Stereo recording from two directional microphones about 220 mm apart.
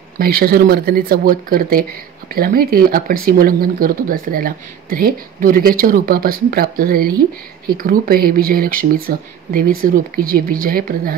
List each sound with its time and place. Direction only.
0.2 s speech: 45° right (ahead or behind)